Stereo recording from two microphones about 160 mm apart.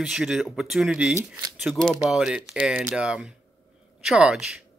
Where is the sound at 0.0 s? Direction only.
5° right (ahead or behind).